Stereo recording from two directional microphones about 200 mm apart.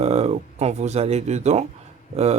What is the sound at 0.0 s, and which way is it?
Speech, 30° right (ahead or behind).